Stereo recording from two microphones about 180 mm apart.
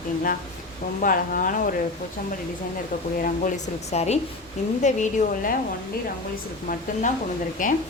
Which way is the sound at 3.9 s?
35° left (ahead or behind).